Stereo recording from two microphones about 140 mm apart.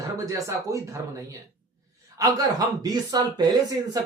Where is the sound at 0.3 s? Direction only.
25° right (ahead or behind).